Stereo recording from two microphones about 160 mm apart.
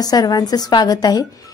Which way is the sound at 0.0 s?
25° left (ahead or behind).